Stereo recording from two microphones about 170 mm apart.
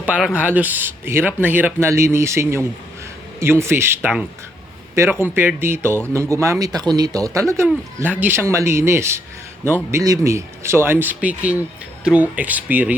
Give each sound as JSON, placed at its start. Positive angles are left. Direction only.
{"t": 0.0, "sound": "speech", "side_deg": -5}
{"t": 5.2, "sound": "speech", "side_deg": -10}